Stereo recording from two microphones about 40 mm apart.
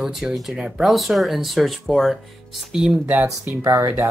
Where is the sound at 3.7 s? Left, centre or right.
Right.